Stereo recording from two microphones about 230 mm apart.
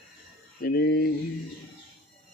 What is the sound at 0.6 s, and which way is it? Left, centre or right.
Speech, left.